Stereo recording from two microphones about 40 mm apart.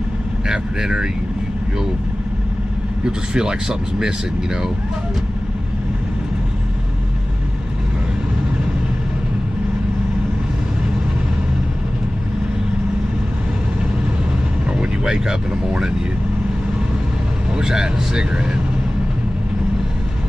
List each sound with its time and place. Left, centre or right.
0.5 s speech: centre
3.1 s speech: centre
14.8 s vehicle: centre
17.6 s speech: centre